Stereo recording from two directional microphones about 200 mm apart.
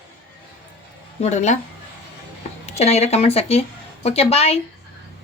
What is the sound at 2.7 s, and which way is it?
Speech, 35° left (ahead or behind).